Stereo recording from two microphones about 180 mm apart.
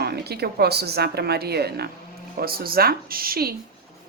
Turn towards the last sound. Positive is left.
turn(degrees=-55)  # may be behind; listen again after turning